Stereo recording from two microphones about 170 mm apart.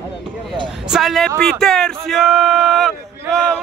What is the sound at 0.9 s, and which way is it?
Speech, centre (ahead or behind).